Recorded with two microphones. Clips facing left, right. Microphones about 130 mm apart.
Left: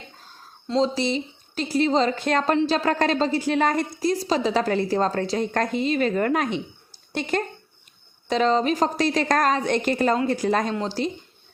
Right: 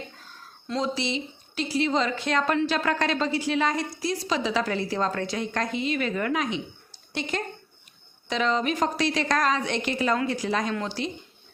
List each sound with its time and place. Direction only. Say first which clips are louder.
0.9 s a woman's voice: left 5 dB; 40° left (ahead or behind)
2.5 s a woman's voice: left 5 dB; 30° left (ahead or behind); by 10.7 s 50° left (ahead or behind)
10.7 s a woman's voice: left 4 dB; 35° left (ahead or behind)